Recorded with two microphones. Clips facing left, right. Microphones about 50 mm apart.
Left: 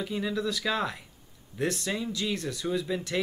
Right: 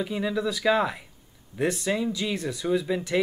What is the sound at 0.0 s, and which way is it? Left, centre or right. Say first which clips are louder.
Speech: right 3 dB; centre.